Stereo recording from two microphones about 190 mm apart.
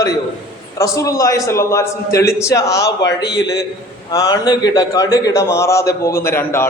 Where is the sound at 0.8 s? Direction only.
15° left (ahead or behind).